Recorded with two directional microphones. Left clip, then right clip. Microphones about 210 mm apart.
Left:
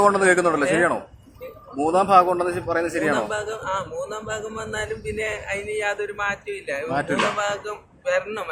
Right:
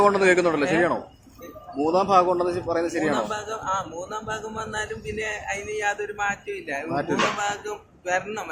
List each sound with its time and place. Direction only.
0.0 s a man's voice: 10° left (ahead or behind)
6.9 s a man's voice: 15° left (ahead or behind)
7.3 s speech: centre (ahead or behind)